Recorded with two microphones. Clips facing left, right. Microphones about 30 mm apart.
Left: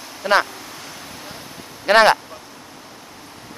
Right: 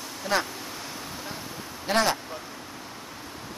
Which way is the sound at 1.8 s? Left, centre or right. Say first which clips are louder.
Left 11 dB; left.